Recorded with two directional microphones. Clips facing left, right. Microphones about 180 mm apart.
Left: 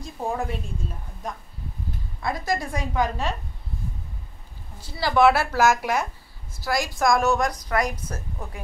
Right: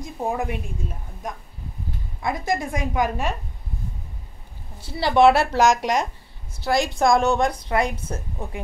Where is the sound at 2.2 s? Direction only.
20° right (ahead or behind).